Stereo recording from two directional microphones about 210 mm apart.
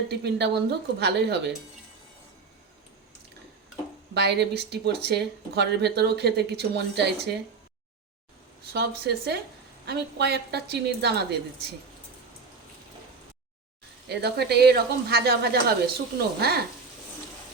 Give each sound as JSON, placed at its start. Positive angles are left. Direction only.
{"t": 0.1, "sound": "speech", "side_deg": -55}
{"t": 4.1, "sound": "speech", "side_deg": -55}
{"t": 8.7, "sound": "speech", "side_deg": -50}
{"t": 14.1, "sound": "speech", "side_deg": -50}